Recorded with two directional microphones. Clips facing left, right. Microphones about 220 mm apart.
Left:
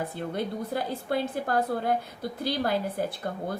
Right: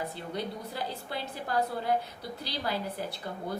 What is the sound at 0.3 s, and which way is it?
A woman's voice, 50° left (ahead or behind).